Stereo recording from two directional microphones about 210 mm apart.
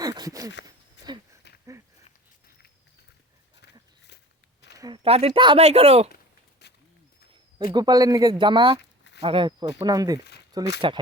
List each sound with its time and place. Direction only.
0.0 s a sound: 20° right (ahead or behind)
3.6 s dog: 55° left (ahead or behind)
4.8 s speech: 25° right (ahead or behind)
7.6 s speech: 20° right (ahead or behind)
8.8 s a sound: 55° left (ahead or behind)
9.2 s speech: 25° right (ahead or behind)